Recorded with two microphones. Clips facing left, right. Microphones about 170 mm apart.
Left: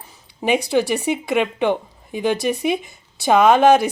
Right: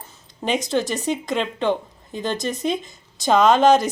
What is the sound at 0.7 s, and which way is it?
Speech, 10° left (ahead or behind).